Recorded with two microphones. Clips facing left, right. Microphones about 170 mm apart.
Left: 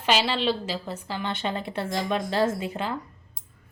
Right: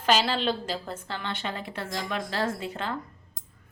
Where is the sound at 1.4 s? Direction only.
25° left (ahead or behind).